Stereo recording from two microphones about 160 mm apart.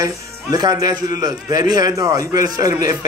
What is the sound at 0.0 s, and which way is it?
A man's voice, 20° right (ahead or behind).